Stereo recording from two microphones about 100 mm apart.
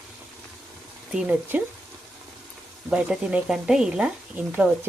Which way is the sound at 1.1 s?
10° right (ahead or behind).